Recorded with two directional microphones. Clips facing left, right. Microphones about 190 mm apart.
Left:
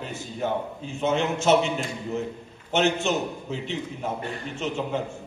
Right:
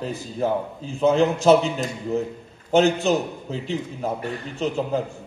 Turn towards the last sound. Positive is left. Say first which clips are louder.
# right 4 dB
turn(degrees=-35)  # may be behind; listen again after turning